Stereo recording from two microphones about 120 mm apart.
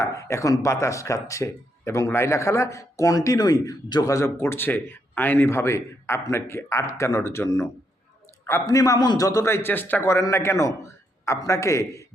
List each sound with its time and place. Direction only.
0.0 s a man's voice: 25° left (ahead or behind)